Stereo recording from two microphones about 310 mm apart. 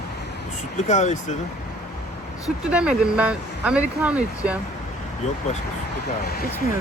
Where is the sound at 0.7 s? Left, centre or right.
Left.